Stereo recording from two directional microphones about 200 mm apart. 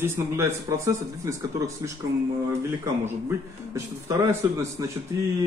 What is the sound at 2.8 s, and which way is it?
A man's voice, 15° right (ahead or behind).